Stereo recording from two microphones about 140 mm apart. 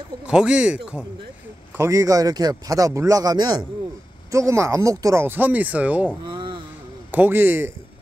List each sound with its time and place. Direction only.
0.3 s speech: 5° right (ahead or behind)
1.8 s speech: 20° right (ahead or behind)
6.2 s a sound: 35° right (ahead or behind)
7.1 s speech: 15° right (ahead or behind)